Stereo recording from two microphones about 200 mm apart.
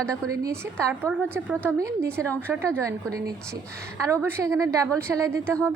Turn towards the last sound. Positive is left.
turn(degrees=-15)  # may be behind; listen again after turning